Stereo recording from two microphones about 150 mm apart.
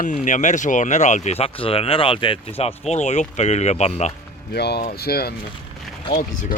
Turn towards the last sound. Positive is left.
turn(degrees=65)  # may be behind; listen again after turning